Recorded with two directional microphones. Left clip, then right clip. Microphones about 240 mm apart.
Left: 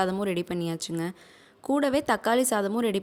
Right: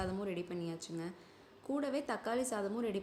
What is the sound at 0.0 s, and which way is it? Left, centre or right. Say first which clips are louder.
A woman's voice: left 12 dB; left.